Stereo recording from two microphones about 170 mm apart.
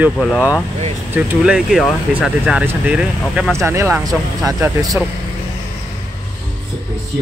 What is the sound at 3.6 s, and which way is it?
Speech, 15° right (ahead or behind).